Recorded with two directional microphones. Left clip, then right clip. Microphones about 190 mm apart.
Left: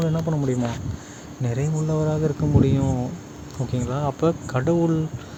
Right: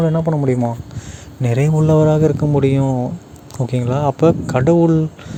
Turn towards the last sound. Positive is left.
turn(degrees=-35)  # may be behind; listen again after turning